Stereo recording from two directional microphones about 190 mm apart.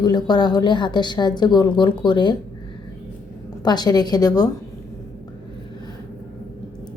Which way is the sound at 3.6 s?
20° left (ahead or behind).